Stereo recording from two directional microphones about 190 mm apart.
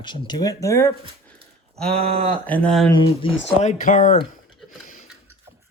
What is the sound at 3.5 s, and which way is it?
Speech, 40° left (ahead or behind).